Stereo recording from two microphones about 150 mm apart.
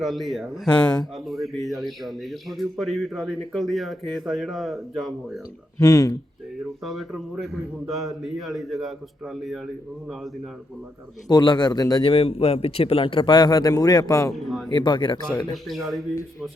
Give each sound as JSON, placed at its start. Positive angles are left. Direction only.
{"t": 0.0, "sound": "a man's voice", "side_deg": 0}
{"t": 5.8, "sound": "a man's voice", "side_deg": 25}
{"t": 6.6, "sound": "a man's voice", "side_deg": 0}
{"t": 11.3, "sound": "a man's voice", "side_deg": 30}
{"t": 12.1, "sound": "speech", "side_deg": 40}
{"t": 14.3, "sound": "a man's voice", "side_deg": 0}
{"t": 14.7, "sound": "speech", "side_deg": 30}
{"t": 15.6, "sound": "a man's voice", "side_deg": 0}